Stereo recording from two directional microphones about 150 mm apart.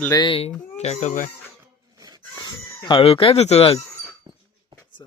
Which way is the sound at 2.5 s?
25° left (ahead or behind).